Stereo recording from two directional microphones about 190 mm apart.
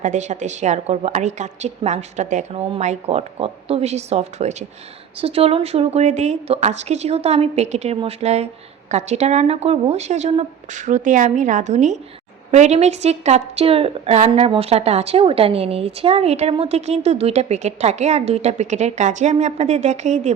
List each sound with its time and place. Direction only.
0.0 s a woman's voice: 40° right (ahead or behind)